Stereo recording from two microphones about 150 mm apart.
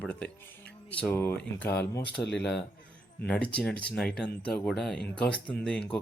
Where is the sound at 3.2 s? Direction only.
10° left (ahead or behind).